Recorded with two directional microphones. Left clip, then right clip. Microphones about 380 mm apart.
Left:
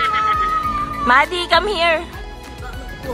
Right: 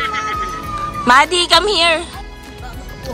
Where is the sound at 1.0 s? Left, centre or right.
Centre.